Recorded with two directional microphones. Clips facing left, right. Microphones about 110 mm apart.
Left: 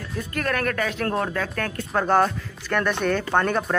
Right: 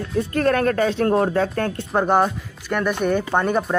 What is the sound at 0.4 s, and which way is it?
Speech, 30° right (ahead or behind).